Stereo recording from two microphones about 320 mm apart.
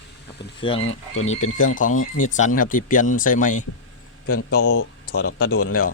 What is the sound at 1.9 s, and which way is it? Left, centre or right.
Speech, left.